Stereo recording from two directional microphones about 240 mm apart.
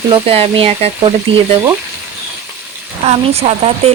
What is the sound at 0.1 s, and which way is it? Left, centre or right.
Speech, right.